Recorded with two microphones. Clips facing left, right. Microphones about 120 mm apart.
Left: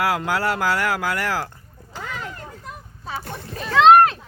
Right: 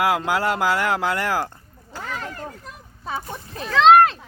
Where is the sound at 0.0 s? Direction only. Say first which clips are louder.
Right 1 dB; 15° right (ahead or behind).